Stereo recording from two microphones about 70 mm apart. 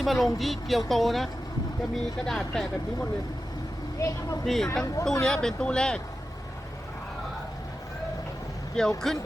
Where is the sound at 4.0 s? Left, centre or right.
Left.